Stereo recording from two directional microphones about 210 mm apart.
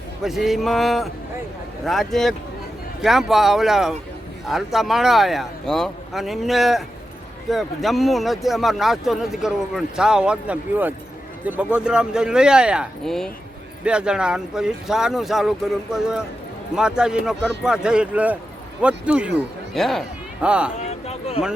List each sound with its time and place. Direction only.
0.3 s speech: centre (ahead or behind)
20.7 s speech: 30° left (ahead or behind)